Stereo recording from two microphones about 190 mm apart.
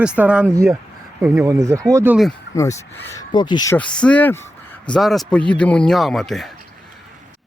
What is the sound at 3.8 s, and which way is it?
Speech, 5° left (ahead or behind).